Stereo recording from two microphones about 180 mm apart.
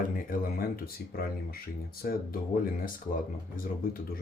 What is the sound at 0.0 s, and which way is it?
Speech, 50° left (ahead or behind).